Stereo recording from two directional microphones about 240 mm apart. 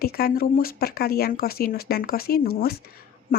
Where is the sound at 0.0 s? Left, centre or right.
Left.